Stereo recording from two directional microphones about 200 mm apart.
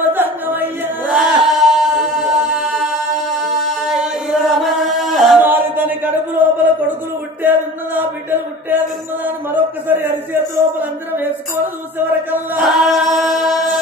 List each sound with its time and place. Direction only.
0.1 s chant: 10° right (ahead or behind)